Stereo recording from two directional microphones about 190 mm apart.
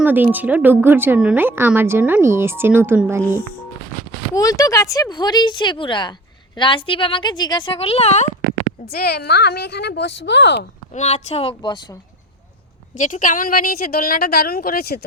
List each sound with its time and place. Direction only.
0.0 s speech: 10° right (ahead or behind)
4.4 s speech: 20° left (ahead or behind); by 8.3 s 35° left (ahead or behind)
8.9 s a woman's voice: 55° left (ahead or behind)
10.9 s speech: 35° left (ahead or behind)
13.0 s a woman's voice: 45° left (ahead or behind)